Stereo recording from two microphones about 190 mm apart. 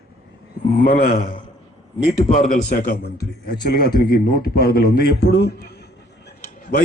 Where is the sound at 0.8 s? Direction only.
45° left (ahead or behind).